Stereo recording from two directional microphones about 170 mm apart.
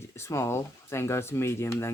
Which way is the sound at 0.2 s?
15° left (ahead or behind).